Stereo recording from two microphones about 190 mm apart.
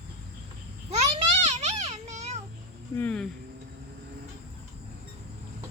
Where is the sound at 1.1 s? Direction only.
35° right (ahead or behind).